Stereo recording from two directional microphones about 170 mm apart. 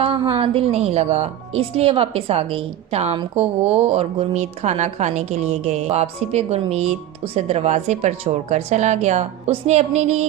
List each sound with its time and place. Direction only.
0.0 s speech: 35° right (ahead or behind)